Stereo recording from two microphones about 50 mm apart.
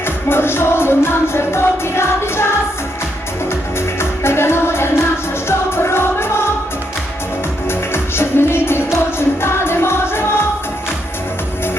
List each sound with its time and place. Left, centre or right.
0.0 s music: left
3.8 s music: left
7.7 s music: left